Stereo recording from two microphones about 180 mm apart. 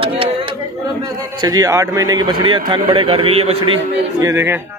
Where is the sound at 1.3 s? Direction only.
20° right (ahead or behind).